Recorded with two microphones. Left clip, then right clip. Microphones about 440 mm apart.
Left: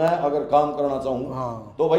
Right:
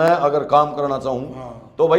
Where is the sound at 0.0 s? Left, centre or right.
Right.